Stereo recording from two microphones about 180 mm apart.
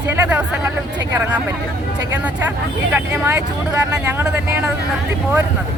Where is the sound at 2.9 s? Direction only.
10° right (ahead or behind).